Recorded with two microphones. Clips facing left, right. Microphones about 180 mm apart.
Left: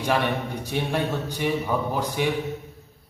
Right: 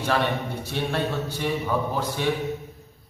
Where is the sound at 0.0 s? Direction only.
15° left (ahead or behind).